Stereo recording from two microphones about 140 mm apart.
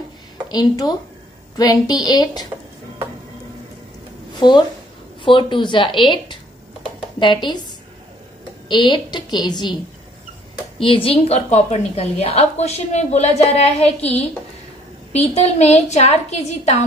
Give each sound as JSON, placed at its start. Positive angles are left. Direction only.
{"t": 0.5, "sound": "a woman's voice", "side_deg": 30}
{"t": 4.4, "sound": "a woman's voice", "side_deg": 30}
{"t": 8.6, "sound": "a woman's voice", "side_deg": 35}
{"t": 10.8, "sound": "a woman's voice", "side_deg": 40}
{"t": 15.1, "sound": "a woman's voice", "side_deg": 50}